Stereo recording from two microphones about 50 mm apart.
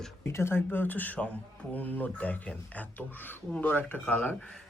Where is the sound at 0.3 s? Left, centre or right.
Left.